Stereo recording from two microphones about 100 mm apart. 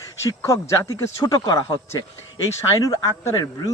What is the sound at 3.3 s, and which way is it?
Speech, 45° left (ahead or behind).